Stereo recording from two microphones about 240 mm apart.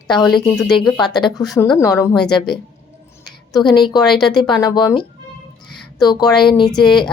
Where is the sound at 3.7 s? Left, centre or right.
Centre.